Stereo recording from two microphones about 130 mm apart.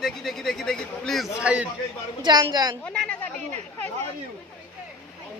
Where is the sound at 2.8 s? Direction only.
5° left (ahead or behind).